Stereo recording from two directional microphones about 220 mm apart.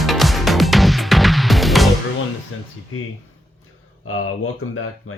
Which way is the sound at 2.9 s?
70° left (ahead or behind).